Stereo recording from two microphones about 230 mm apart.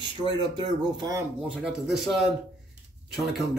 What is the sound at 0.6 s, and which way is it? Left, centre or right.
Speech, centre.